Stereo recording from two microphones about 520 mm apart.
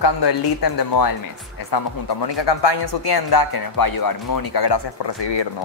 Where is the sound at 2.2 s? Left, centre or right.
Left.